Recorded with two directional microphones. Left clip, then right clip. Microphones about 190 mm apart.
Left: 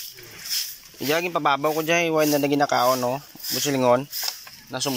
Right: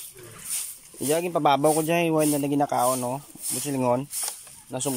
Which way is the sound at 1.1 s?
20° right (ahead or behind).